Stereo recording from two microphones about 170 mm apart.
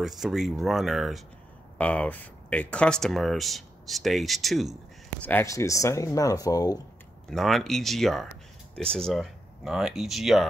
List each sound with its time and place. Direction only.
0.0 s speech: centre (ahead or behind)
5.2 s speech: 15° left (ahead or behind)
7.2 s speech: centre (ahead or behind)